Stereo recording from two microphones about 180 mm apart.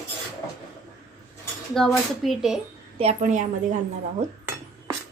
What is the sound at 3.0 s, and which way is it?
Speech, 40° right (ahead or behind).